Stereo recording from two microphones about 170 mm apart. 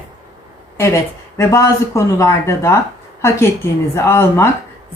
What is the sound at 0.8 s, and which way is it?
A woman's voice, 15° left (ahead or behind).